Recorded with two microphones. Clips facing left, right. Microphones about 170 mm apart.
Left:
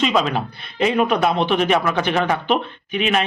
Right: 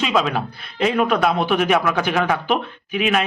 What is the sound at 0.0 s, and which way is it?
A man's voice, centre (ahead or behind).